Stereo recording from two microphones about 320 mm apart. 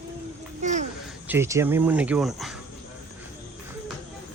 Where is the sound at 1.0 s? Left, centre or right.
Centre.